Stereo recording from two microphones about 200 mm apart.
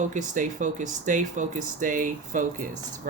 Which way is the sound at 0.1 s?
40° right (ahead or behind).